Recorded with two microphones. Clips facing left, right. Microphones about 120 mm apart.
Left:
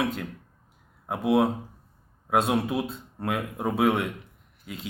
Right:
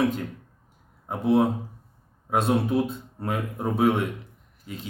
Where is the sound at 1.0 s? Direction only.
5° left (ahead or behind).